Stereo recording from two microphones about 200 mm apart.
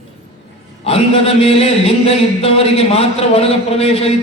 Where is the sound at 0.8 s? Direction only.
30° left (ahead or behind).